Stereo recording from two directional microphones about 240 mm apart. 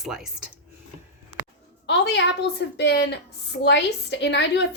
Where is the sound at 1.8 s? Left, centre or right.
Left.